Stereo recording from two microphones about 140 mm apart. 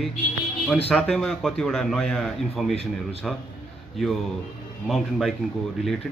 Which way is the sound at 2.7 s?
45° left (ahead or behind).